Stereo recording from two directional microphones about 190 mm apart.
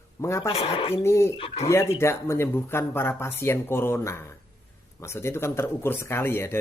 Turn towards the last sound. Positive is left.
turn(degrees=10)  # may be behind; listen again after turning